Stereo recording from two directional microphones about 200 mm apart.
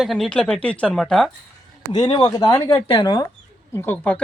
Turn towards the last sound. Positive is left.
turn(degrees=10)  # may be behind; listen again after turning